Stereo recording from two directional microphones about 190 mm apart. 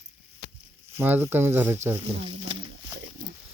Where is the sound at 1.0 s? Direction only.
10° right (ahead or behind).